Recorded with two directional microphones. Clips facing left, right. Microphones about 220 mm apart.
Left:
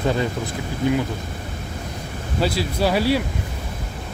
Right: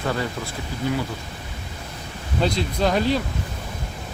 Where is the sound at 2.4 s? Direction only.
5° left (ahead or behind).